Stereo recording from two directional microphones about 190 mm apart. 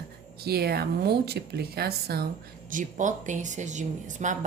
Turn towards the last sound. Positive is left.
turn(degrees=-40)  # may be behind; listen again after turning